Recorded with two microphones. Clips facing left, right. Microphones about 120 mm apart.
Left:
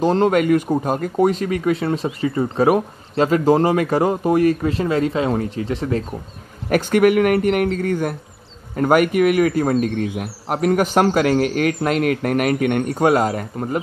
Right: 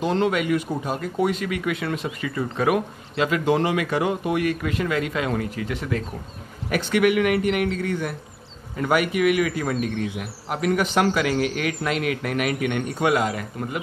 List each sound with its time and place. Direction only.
0.0 s speech: 40° left (ahead or behind)
6.7 s a man's voice: 45° left (ahead or behind)